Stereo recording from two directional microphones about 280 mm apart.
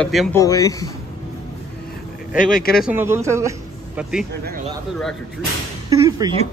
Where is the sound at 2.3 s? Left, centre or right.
Left.